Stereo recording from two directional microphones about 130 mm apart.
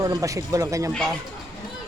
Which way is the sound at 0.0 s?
25° right (ahead or behind).